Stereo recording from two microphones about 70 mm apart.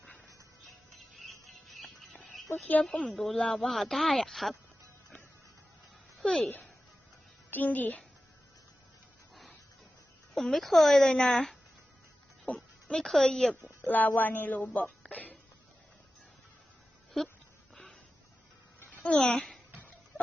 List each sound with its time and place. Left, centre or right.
0.9 s music: centre
2.8 s speech: centre
6.1 s a sound: centre
7.5 s speech: left
10.3 s speech: centre
13.8 s speech: left
15.0 s music: left
19.0 s a child's voice: centre